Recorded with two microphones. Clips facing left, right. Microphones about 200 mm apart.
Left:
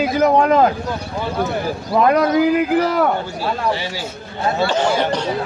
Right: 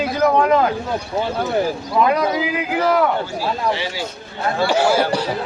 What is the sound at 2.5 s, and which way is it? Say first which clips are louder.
Speech: left 3 dB; 50° left (ahead or behind).